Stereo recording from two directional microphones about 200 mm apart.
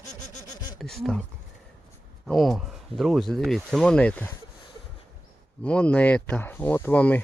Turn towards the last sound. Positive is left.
turn(degrees=10)  # may be behind; listen again after turning